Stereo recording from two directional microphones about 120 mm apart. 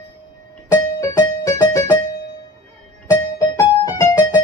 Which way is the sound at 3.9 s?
25° left (ahead or behind).